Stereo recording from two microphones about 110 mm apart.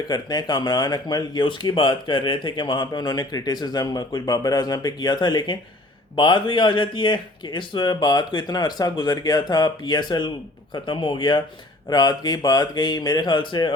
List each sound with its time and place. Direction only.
0.1 s speech: 40° left (ahead or behind)